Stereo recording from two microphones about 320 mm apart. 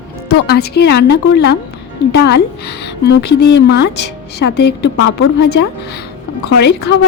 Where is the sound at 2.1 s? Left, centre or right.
Left.